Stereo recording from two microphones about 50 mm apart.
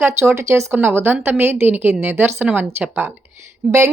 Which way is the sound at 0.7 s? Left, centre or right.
Right.